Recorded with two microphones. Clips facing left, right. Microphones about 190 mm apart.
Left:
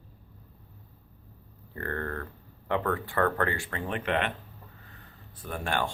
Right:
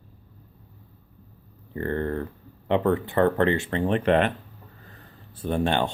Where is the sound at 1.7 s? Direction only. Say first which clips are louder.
Right 7 dB; 20° right (ahead or behind); by 4.3 s 35° right (ahead or behind).